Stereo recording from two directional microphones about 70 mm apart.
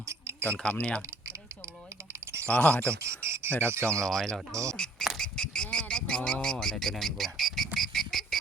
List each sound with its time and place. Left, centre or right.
0.1 s a sound: right
0.4 s speech: centre
2.5 s speech: centre
2.8 s speech: right
4.0 s speech: centre
4.5 s speech: right
5.1 s a sound: centre